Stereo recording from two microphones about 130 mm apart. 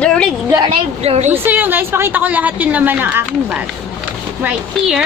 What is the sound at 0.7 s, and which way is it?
Speech, 50° right (ahead or behind).